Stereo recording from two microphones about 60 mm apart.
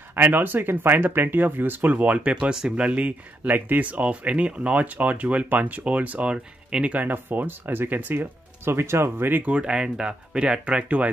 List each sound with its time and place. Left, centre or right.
0.1 s speech: right
7.1 s speech: right
9.4 s speech: centre